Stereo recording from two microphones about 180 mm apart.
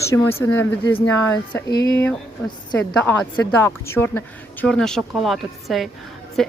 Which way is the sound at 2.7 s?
5° left (ahead or behind).